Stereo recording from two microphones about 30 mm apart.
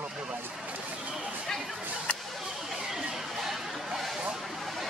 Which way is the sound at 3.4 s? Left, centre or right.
Centre.